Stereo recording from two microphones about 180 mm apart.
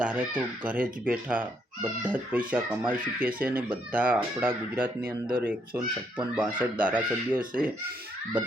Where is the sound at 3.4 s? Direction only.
10° right (ahead or behind).